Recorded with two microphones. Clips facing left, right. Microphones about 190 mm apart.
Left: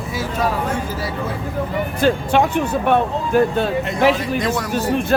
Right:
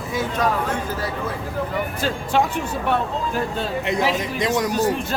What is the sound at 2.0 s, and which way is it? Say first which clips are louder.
Speech: left 6 dB; 65° left (ahead or behind).